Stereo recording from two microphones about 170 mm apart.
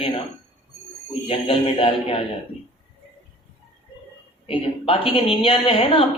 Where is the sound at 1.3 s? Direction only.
35° left (ahead or behind).